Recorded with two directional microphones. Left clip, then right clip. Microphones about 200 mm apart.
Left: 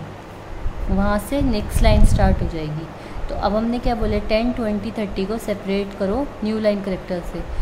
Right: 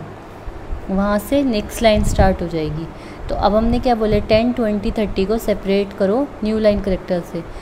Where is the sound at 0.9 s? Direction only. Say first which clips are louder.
Right 4 dB; 10° right (ahead or behind).